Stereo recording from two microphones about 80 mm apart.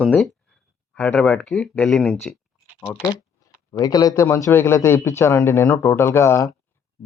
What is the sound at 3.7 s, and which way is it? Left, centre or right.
Speech, left.